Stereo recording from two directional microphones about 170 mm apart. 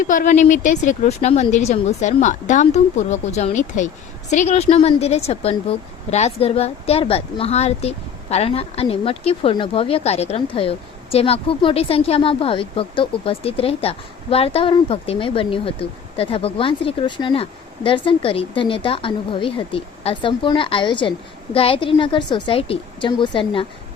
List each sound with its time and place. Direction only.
0.1 s a woman's voice: 50° left (ahead or behind); by 23.6 s 30° left (ahead or behind)